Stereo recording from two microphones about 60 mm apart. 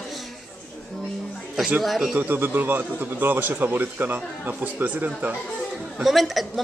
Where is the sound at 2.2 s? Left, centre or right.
Right.